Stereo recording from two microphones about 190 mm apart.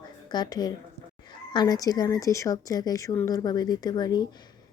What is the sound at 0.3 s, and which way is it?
Speech, 20° left (ahead or behind).